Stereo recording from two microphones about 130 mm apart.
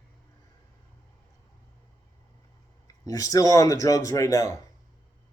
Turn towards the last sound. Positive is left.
turn(degrees=25)  # may be behind; listen again after turning